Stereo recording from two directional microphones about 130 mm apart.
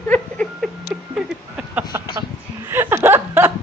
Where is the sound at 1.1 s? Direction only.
5° right (ahead or behind).